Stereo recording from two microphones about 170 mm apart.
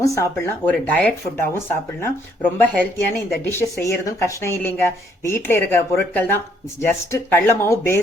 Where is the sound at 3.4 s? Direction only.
15° left (ahead or behind).